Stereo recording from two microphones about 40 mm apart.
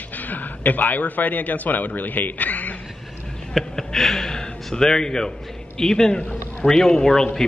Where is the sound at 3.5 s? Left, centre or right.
Centre.